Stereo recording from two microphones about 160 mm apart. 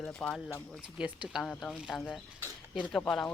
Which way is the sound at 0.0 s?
5° left (ahead or behind).